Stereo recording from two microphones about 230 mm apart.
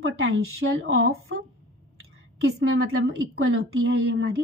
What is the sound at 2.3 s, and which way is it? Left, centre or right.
A woman's voice, right.